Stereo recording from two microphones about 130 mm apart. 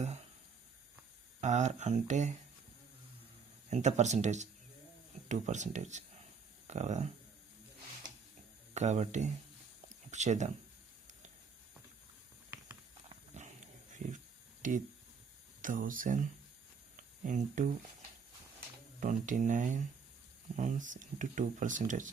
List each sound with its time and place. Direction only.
1.4 s speech: 65° right (ahead or behind)
3.7 s speech: 60° right (ahead or behind)
8.7 s speech: 65° right (ahead or behind)
13.3 s dog: 65° right (ahead or behind)
14.6 s speech: 90° right
17.0 s a sound: 80° right
18.9 s speech: 75° right (ahead or behind)